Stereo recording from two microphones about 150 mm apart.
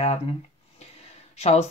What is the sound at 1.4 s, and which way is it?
Speech, 45° left (ahead or behind).